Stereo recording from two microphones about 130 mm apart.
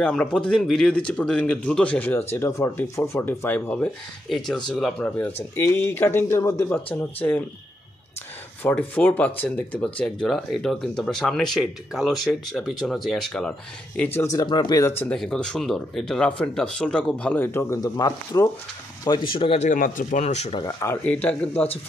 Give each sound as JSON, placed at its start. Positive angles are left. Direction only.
{"t": 0.0, "sound": "speech", "side_deg": 5}
{"t": 4.6, "sound": "speech", "side_deg": 0}
{"t": 5.0, "sound": "speech", "side_deg": 15}
{"t": 8.6, "sound": "speech", "side_deg": 10}
{"t": 14.4, "sound": "speech", "side_deg": 35}
{"t": 14.9, "sound": "speech", "side_deg": 15}
{"t": 15.1, "sound": "speech", "side_deg": 5}
{"t": 19.3, "sound": "speech", "side_deg": 45}
{"t": 19.6, "sound": "speech", "side_deg": 85}
{"t": 20.6, "sound": "speech", "side_deg": 20}